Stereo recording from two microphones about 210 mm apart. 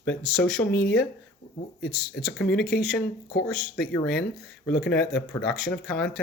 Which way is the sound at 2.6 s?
45° left (ahead or behind).